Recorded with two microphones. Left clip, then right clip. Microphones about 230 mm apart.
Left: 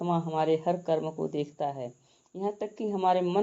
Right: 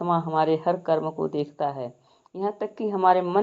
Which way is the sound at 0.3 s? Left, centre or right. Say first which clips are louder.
Right 3 dB; centre.